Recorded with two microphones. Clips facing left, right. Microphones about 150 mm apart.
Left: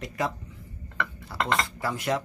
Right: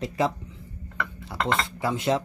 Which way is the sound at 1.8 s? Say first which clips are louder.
Right 3 dB; 25° right (ahead or behind).